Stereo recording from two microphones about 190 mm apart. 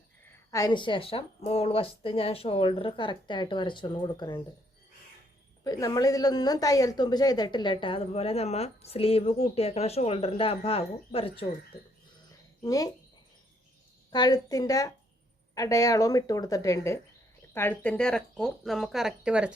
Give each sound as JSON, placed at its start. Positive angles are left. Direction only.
{"t": 0.5, "sound": "speech", "side_deg": 20}
{"t": 5.6, "sound": "speech", "side_deg": 20}
{"t": 12.6, "sound": "speech", "side_deg": 20}
{"t": 14.1, "sound": "speech", "side_deg": 20}